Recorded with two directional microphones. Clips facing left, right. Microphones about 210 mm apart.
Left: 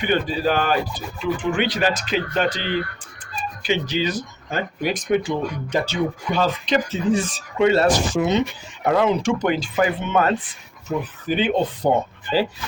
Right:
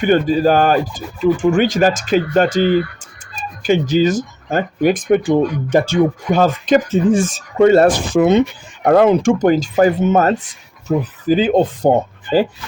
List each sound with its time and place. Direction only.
0.0 s speech: 45° right (ahead or behind)